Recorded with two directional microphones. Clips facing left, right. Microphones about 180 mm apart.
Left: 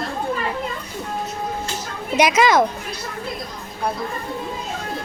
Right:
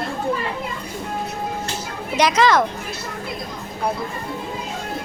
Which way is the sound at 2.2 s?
10° left (ahead or behind).